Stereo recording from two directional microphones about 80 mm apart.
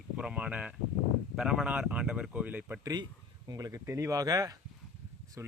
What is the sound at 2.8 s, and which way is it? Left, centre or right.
Speech, right.